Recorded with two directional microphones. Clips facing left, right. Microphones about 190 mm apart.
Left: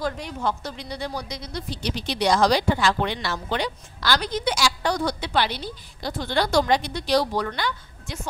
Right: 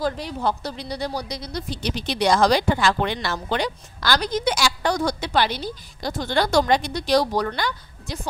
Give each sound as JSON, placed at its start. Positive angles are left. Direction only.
{"t": 0.0, "sound": "speech", "side_deg": -35}
{"t": 1.8, "sound": "speech", "side_deg": -50}